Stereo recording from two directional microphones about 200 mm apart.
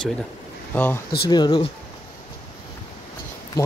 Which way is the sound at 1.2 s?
20° left (ahead or behind).